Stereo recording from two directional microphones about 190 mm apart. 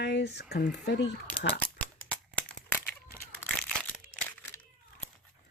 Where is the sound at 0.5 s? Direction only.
60° left (ahead or behind).